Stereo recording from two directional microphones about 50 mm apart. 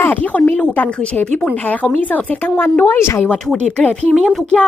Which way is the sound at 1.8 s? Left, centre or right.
Left.